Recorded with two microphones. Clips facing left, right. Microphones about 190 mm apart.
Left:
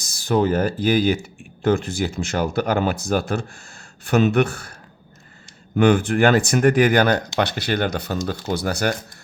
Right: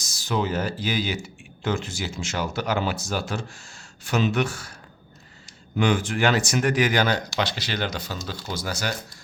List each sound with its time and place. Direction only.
0.3 s speech: 50° left (ahead or behind)
5.7 s speech: 55° left (ahead or behind)